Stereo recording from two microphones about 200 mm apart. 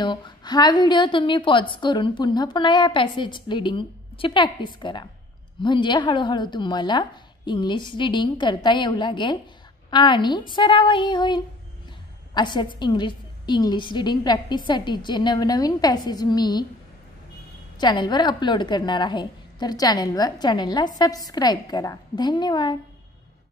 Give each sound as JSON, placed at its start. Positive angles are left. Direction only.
{"t": 0.0, "sound": "a woman's voice", "side_deg": 20}
{"t": 17.7, "sound": "a woman's voice", "side_deg": 20}